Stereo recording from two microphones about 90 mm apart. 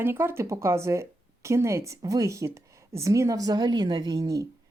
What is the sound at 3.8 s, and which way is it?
Speech, 60° right (ahead or behind).